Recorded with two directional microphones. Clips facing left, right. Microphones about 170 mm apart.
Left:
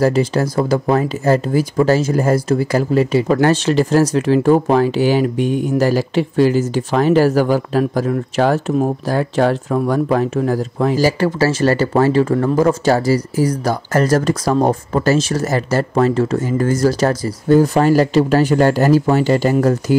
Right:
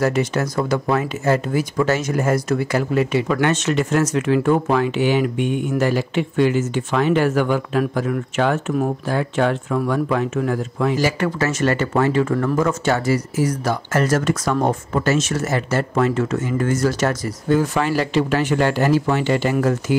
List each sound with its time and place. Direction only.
0.0 s speech: 30° left (ahead or behind)